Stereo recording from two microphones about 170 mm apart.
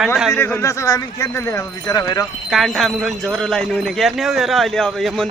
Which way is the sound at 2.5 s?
Centre (ahead or behind).